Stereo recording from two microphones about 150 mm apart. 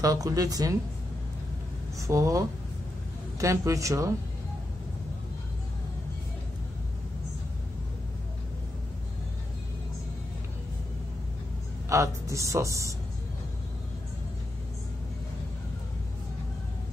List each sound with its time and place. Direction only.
0.0 s a woman's voice: 25° right (ahead or behind)
2.0 s a woman's voice: 20° right (ahead or behind)
11.9 s a woman's voice: 20° right (ahead or behind)